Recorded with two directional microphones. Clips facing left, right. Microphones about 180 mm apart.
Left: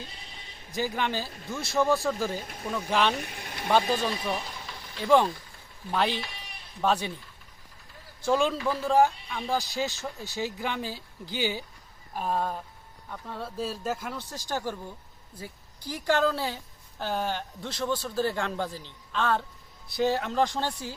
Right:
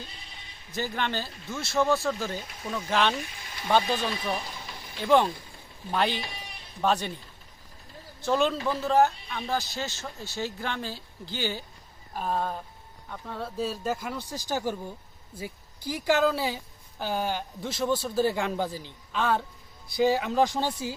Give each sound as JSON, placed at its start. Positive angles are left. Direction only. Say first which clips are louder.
{"t": 0.7, "sound": "speech", "louder": "left 1 dB", "side_deg": 10}
{"t": 3.2, "sound": "speech", "louder": "left 1 dB", "side_deg": 60}
{"t": 3.7, "sound": "speech", "louder": "even", "side_deg": 5}
{"t": 8.2, "sound": "a man's voice", "louder": "even", "side_deg": 5}
{"t": 15.9, "sound": "a man's voice", "louder": "right 1 dB", "side_deg": -10}